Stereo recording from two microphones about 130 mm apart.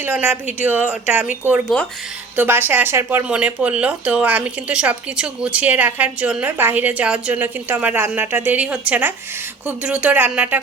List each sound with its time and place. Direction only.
0.0 s speech: 15° right (ahead or behind)
1.7 s speech: centre (ahead or behind)
2.3 s speech: 15° right (ahead or behind)